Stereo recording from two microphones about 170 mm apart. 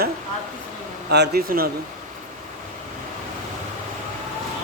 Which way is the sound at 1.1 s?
75° right (ahead or behind).